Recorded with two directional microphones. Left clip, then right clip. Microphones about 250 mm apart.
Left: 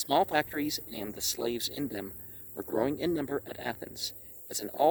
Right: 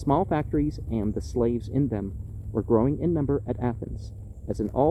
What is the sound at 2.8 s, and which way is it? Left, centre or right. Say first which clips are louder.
Speech: right 4 dB; left.